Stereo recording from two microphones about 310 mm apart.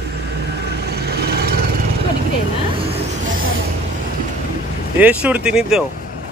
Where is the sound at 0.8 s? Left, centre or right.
Right.